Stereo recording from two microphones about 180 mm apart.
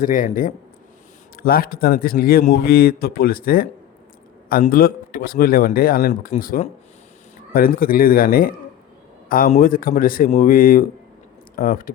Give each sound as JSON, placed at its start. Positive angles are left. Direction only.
{"t": 0.0, "sound": "a man's voice", "side_deg": 50}